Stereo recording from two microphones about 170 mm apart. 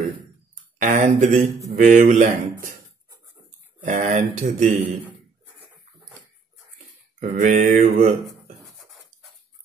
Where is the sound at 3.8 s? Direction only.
45° right (ahead or behind).